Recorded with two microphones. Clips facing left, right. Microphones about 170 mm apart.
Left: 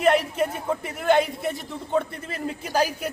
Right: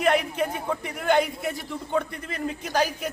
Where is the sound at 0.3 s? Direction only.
Centre (ahead or behind).